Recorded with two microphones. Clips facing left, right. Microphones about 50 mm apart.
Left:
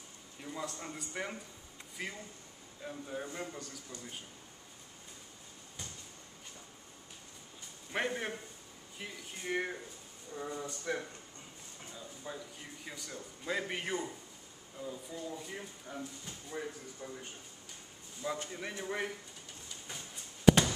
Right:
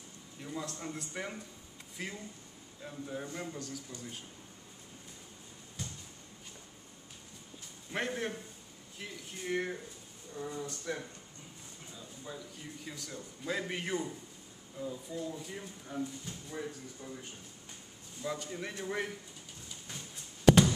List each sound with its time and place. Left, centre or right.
0.4 s a man's voice: centre
5.8 s a sound: centre
7.9 s speech: centre
12.3 s speech: centre
12.8 s a man's voice: centre
18.5 s a man's voice: centre
20.4 s a sound: centre